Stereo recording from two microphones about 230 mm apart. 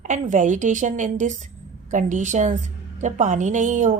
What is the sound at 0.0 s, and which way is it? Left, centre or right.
A woman's voice, right.